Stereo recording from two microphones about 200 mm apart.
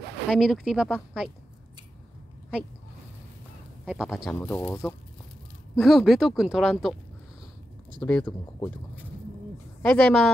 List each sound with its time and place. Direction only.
0.3 s speech: centre (ahead or behind)
3.8 s speech: centre (ahead or behind)
4.4 s speech: 15° left (ahead or behind)
5.8 s speech: centre (ahead or behind)
8.0 s speech: 5° left (ahead or behind)
8.3 s speech: 20° left (ahead or behind)
9.8 s a woman's voice: 5° left (ahead or behind)